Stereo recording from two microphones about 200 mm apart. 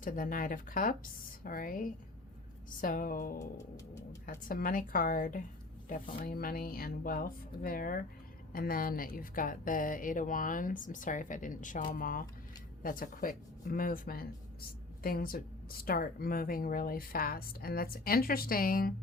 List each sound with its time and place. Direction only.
0.0 s speech: 45° left (ahead or behind)